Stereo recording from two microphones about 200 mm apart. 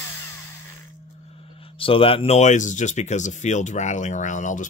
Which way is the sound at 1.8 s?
25° left (ahead or behind).